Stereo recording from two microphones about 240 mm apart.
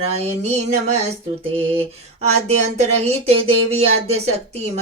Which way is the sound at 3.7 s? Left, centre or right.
Right.